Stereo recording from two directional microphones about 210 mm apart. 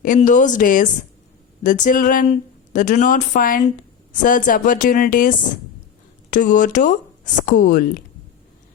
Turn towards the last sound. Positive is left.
turn(degrees=40)  # may be behind; listen again after turning